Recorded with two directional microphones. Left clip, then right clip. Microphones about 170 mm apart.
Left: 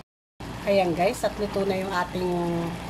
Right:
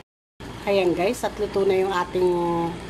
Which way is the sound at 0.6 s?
30° right (ahead or behind).